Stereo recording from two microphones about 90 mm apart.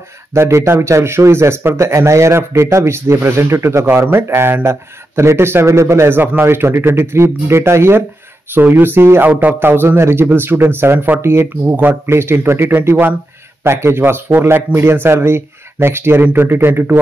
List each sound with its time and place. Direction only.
0.3 s speech: 30° right (ahead or behind)